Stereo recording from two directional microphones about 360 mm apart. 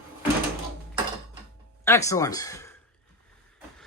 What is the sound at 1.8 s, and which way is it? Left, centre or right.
Speech, centre.